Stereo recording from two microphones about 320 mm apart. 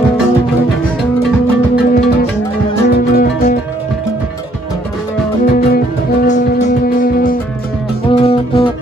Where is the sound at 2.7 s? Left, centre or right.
Left.